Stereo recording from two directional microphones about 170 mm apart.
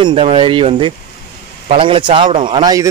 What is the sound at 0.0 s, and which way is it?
A man's voice, 35° right (ahead or behind).